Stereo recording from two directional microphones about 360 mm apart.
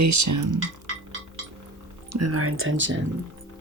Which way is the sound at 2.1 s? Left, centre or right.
Right.